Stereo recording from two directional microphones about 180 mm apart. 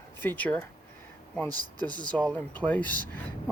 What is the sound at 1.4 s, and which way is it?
Speech, 20° right (ahead or behind).